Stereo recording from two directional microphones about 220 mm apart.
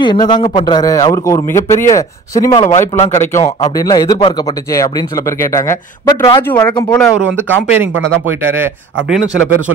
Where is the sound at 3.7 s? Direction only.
15° left (ahead or behind).